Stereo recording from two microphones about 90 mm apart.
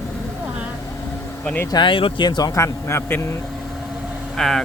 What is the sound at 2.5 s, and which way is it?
Speech, 30° left (ahead or behind).